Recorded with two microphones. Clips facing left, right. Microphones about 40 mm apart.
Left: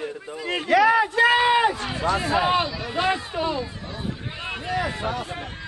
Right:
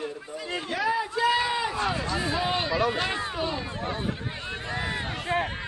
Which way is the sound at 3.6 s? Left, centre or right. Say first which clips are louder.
Right 4 dB; right.